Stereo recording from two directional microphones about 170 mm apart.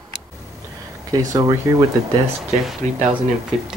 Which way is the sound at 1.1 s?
20° right (ahead or behind).